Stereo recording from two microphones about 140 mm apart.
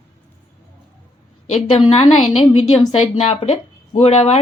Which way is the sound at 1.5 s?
50° left (ahead or behind).